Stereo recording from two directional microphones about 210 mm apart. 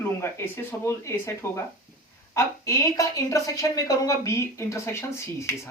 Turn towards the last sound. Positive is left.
turn(degrees=15)  # may be behind; listen again after turning